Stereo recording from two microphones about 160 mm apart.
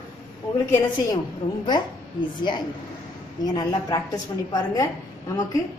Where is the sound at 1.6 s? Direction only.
25° left (ahead or behind).